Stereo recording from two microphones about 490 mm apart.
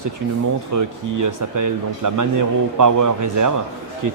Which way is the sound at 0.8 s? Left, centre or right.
Right.